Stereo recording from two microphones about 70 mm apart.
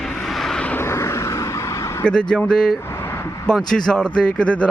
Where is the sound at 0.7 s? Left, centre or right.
Left.